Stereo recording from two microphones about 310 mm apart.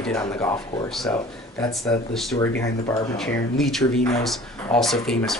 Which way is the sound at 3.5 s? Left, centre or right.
Centre.